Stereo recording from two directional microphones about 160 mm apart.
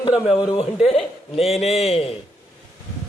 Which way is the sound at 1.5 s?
40° left (ahead or behind).